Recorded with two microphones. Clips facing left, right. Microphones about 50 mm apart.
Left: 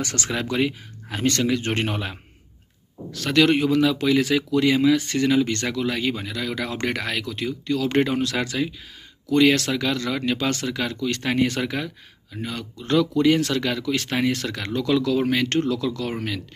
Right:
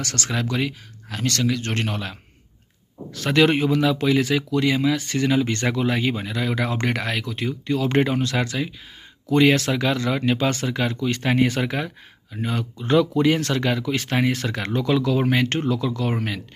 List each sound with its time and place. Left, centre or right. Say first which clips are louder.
0.0 s speech: even; centre
3.1 s speech: even; centre